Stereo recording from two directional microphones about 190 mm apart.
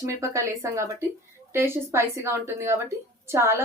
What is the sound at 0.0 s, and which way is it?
A woman's voice, 15° right (ahead or behind).